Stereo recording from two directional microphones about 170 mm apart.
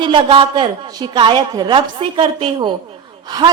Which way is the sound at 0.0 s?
30° right (ahead or behind).